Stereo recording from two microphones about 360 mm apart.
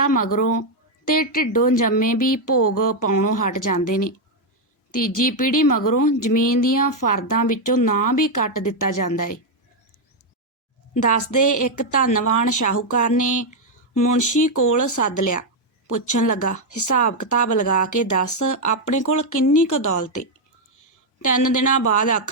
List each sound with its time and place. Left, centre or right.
0.0 s a woman's voice: left
10.9 s a woman's voice: left